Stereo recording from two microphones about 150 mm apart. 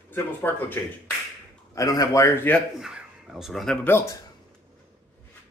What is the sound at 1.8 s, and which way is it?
Speech, 20° left (ahead or behind).